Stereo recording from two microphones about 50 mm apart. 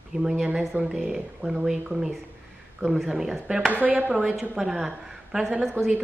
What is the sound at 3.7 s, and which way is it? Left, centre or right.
Speech, right.